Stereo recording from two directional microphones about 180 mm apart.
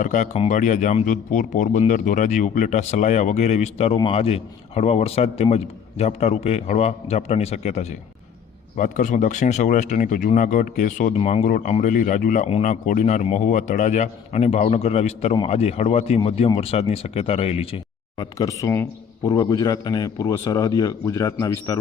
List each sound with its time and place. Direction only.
0.0 s a man's voice: 45° left (ahead or behind)
11.2 s a man's voice: 35° left (ahead or behind)
18.2 s a man's voice: 20° left (ahead or behind)